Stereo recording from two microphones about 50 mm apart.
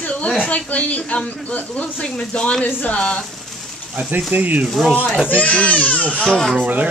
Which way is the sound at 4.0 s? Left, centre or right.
Right.